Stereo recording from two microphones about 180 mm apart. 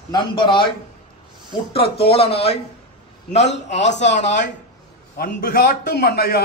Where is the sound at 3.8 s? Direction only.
75° left (ahead or behind).